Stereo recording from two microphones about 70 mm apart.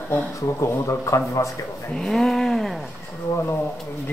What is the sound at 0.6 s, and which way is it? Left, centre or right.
Speech, left.